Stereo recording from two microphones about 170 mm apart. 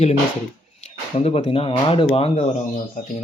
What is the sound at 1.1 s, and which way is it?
Speech, 40° left (ahead or behind).